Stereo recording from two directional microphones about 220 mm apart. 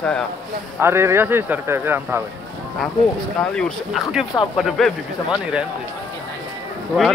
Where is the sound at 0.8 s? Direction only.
10° right (ahead or behind).